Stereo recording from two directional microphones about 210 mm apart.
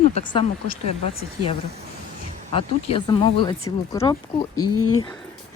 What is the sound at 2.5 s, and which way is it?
Speech, 25° left (ahead or behind).